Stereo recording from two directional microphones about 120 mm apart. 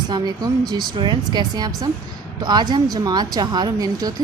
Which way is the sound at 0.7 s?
40° right (ahead or behind).